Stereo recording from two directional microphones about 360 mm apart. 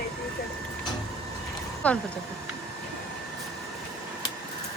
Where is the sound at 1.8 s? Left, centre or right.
Centre.